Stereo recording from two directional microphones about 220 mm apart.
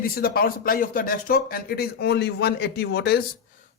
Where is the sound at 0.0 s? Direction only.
45° left (ahead or behind).